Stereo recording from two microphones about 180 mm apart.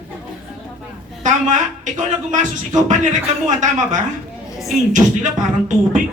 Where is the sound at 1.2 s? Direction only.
45° right (ahead or behind).